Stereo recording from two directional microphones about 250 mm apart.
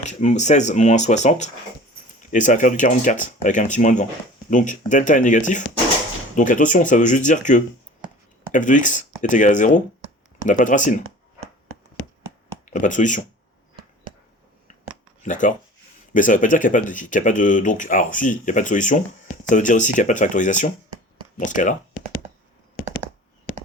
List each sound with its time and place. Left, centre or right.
0.0 s speech: left
12.7 s speech: left
15.2 s speech: left